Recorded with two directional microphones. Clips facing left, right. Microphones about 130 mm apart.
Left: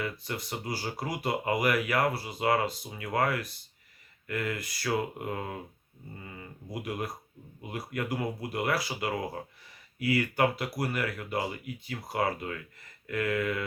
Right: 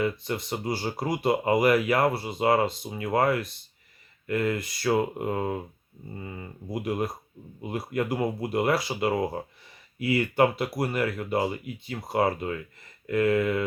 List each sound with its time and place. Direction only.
0.0 s speech: 25° right (ahead or behind)